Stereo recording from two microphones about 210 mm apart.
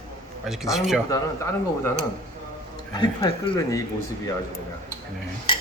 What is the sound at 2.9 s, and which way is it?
Speech, 20° left (ahead or behind).